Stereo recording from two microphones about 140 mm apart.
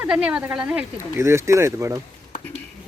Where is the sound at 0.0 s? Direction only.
10° right (ahead or behind).